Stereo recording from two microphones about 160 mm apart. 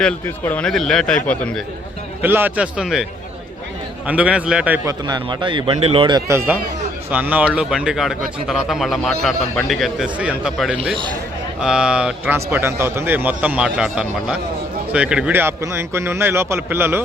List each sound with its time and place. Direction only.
0.0 s speech: 10° left (ahead or behind)
2.2 s a man's voice: 10° right (ahead or behind)
4.9 s a man's voice: 25° right (ahead or behind)